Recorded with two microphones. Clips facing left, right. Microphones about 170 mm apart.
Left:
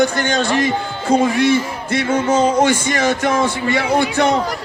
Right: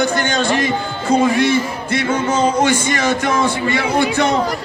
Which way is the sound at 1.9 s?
45° left (ahead or behind).